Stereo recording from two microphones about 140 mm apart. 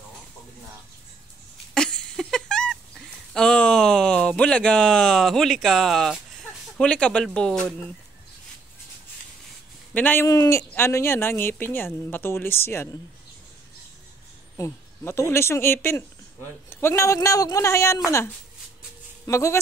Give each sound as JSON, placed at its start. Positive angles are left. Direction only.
{"t": 1.7, "sound": "a sound", "side_deg": 5}
{"t": 3.3, "sound": "a woman's voice", "side_deg": 5}
{"t": 9.9, "sound": "a woman's voice", "side_deg": 15}
{"t": 14.6, "sound": "a woman's voice", "side_deg": 20}